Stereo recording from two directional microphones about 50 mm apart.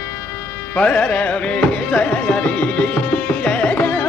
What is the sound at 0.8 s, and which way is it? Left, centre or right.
Music, left.